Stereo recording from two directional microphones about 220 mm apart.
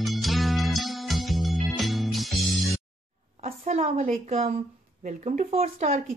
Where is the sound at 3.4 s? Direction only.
30° right (ahead or behind).